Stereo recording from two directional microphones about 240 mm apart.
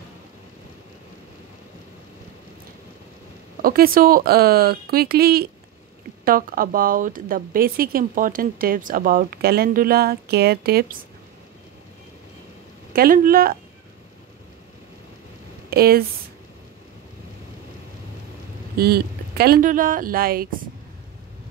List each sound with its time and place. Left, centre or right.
3.6 s a woman's voice: right
12.9 s a woman's voice: right
15.7 s a woman's voice: right
18.8 s a woman's voice: right